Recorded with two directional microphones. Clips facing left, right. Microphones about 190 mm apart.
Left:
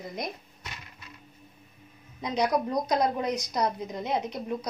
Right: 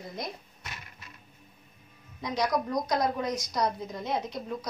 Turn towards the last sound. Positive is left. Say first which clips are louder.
# left 3 dB
turn(degrees=20)  # may be behind; listen again after turning